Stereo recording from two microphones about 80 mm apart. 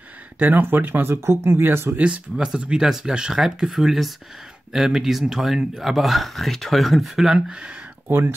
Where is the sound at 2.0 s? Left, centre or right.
Centre.